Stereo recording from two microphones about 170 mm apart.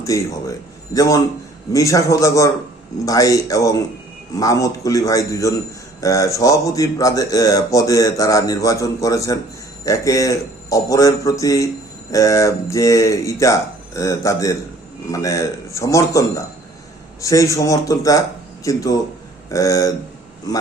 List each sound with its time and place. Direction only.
0.0 s speech: 20° left (ahead or behind)